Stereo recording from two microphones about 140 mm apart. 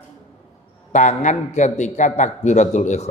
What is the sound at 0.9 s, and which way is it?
A man's voice, 60° left (ahead or behind).